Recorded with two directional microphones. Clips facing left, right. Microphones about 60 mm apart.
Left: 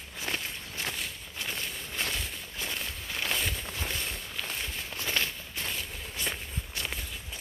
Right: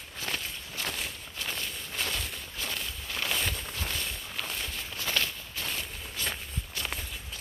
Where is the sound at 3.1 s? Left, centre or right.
Centre.